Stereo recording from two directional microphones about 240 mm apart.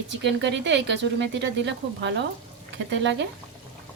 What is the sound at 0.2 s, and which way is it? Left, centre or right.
Speech, right.